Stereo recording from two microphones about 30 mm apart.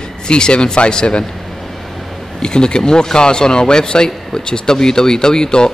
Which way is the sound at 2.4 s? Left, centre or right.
Left.